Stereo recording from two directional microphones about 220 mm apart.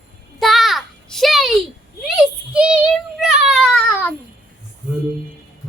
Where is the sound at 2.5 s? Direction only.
5° right (ahead or behind).